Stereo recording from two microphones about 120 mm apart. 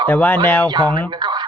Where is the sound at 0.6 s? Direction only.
40° right (ahead or behind).